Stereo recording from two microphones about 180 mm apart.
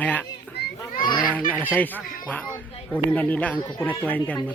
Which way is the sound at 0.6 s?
65° left (ahead or behind).